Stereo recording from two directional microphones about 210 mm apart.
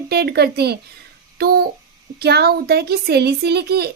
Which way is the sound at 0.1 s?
50° right (ahead or behind).